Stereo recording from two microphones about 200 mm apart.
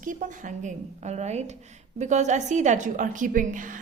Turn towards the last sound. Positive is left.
turn(degrees=-40)  # may be behind; listen again after turning